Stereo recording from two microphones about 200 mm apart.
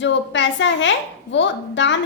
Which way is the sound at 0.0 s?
65° left (ahead or behind).